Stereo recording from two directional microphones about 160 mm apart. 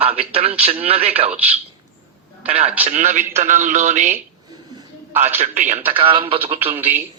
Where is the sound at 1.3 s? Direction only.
10° right (ahead or behind).